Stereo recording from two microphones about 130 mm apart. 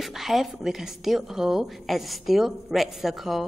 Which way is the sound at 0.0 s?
Centre (ahead or behind).